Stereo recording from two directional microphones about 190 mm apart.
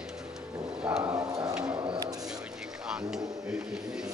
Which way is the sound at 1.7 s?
25° right (ahead or behind).